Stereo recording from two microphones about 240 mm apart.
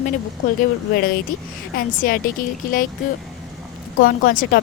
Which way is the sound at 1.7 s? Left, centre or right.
Left.